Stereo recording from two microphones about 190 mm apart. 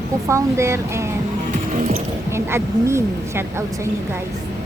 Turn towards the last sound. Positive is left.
turn(degrees=-15)  # may be behind; listen again after turning